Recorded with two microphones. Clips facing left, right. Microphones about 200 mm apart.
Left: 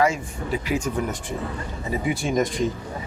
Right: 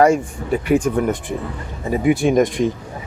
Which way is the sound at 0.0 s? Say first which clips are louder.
Right 8 dB; 55° right (ahead or behind).